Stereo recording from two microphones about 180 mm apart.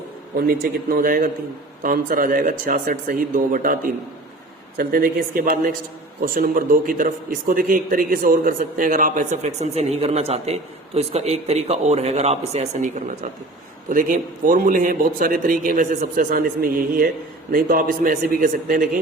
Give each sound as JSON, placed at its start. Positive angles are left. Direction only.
{"t": 0.3, "sound": "a man's voice", "side_deg": -55}